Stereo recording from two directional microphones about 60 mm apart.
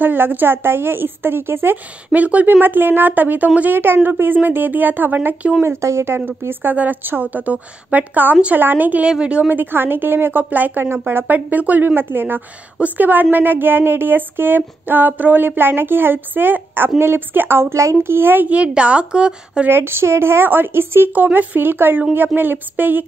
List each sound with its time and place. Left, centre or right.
0.0 s a woman's voice: right
2.1 s speech: right
2.6 s a woman's voice: right
3.7 s a woman's voice: right
5.6 s speech: right
6.0 s a woman's voice: right
9.0 s a woman's voice: centre
9.5 s a woman's voice: right
18.5 s a woman's voice: centre
19.7 s a woman's voice: right
21.1 s a woman's voice: right